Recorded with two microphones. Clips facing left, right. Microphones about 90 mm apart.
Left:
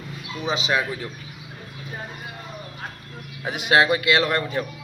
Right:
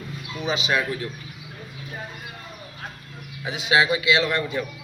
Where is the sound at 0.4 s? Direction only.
30° left (ahead or behind).